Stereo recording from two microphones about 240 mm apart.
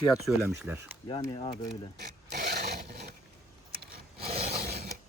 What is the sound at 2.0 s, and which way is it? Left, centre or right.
Filing, right.